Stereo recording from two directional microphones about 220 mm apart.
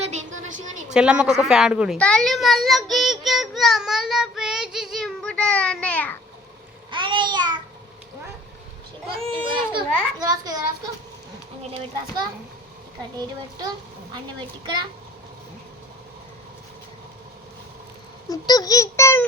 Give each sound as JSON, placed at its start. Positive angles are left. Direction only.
{"t": 0.0, "sound": "a sound", "side_deg": -30}
{"t": 0.9, "sound": "speech", "side_deg": -5}
{"t": 2.0, "sound": "child singing", "side_deg": 5}
{"t": 6.9, "sound": "babbling", "side_deg": -20}
{"t": 9.1, "sound": "a child's voice", "side_deg": -20}
{"t": 18.3, "sound": "speech", "side_deg": 15}